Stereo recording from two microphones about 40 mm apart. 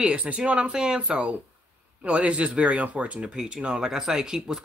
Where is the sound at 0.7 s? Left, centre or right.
Centre.